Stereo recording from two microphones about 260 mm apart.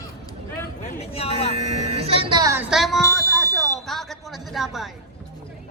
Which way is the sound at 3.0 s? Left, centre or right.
Centre.